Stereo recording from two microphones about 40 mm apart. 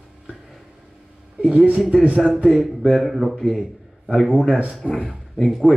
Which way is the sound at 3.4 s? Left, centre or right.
Centre.